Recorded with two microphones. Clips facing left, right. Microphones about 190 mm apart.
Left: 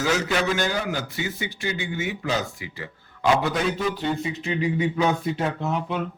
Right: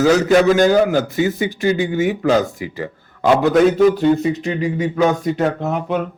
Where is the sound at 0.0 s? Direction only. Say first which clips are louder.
Right 11 dB; 40° right (ahead or behind).